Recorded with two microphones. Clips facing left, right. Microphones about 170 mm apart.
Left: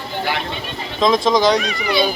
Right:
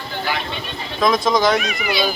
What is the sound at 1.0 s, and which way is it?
Speech, 20° left (ahead or behind).